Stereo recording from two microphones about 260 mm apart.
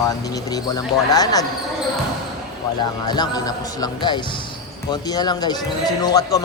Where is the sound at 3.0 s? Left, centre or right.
Centre.